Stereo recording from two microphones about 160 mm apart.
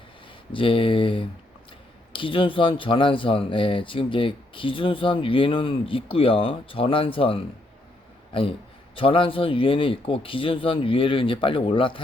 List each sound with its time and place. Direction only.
0.5 s speech: 35° left (ahead or behind)